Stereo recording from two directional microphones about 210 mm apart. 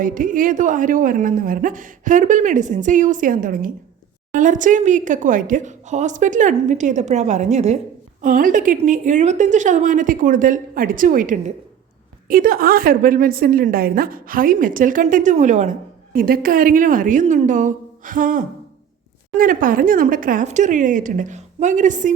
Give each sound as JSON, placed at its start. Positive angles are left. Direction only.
{"t": 0.0, "sound": "a woman's voice", "side_deg": -40}